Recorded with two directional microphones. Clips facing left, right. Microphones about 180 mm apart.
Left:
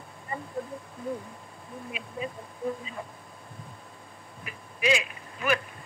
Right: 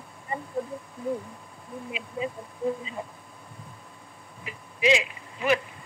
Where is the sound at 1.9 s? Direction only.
20° right (ahead or behind).